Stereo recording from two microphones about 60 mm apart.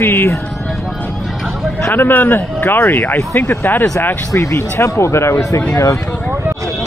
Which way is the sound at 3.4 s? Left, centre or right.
Left.